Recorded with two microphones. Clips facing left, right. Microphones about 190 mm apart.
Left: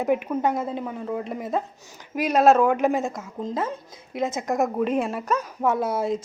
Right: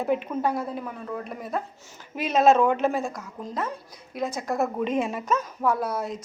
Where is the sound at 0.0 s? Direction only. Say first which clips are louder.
Left 2 dB; 15° left (ahead or behind).